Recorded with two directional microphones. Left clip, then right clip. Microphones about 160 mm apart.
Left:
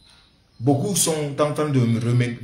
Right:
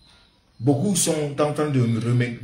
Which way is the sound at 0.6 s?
15° left (ahead or behind).